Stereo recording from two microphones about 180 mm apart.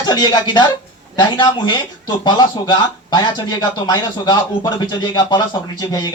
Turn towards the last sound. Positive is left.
turn(degrees=20)  # may be behind; listen again after turning